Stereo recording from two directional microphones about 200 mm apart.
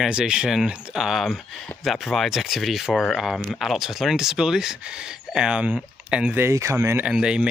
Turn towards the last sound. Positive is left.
turn(degrees=-5)  # may be behind; listen again after turning